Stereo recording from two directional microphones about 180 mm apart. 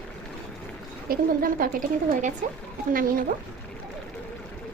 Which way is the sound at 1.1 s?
50° right (ahead or behind).